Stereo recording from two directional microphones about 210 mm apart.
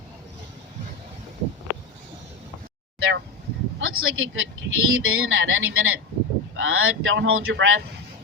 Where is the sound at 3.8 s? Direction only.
70° right (ahead or behind).